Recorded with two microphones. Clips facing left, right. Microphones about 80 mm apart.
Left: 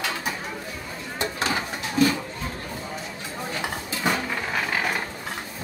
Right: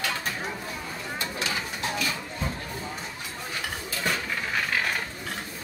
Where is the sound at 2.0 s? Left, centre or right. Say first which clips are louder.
Left 14 dB; left.